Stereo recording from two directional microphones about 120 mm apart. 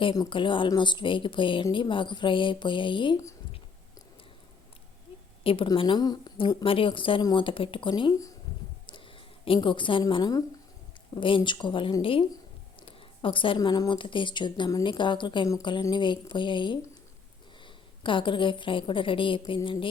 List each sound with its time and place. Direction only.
0.0 s a woman's voice: 40° left (ahead or behind)
5.4 s speech: 50° left (ahead or behind)
6.7 s a woman's voice: 45° left (ahead or behind)
9.4 s a woman's voice: 45° left (ahead or behind)
12.8 s a sound: 45° left (ahead or behind)
13.6 s a woman's voice: 35° left (ahead or behind)
18.0 s a woman's voice: 45° left (ahead or behind)